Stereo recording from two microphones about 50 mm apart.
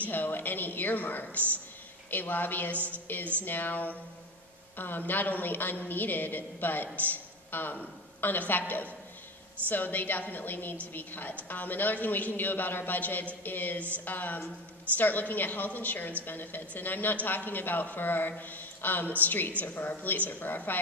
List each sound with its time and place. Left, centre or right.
0.1 s a woman's voice: left